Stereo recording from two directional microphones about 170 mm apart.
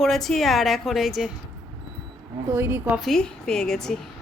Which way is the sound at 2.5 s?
15° right (ahead or behind).